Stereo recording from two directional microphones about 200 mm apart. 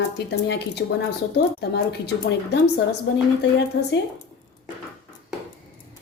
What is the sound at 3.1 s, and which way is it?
Speech, 65° left (ahead or behind).